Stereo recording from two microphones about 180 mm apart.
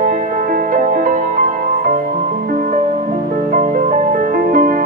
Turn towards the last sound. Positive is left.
turn(degrees=-55)  # may be behind; listen again after turning